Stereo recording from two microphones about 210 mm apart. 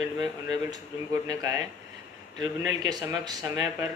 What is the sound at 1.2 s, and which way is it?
Speech, 15° right (ahead or behind).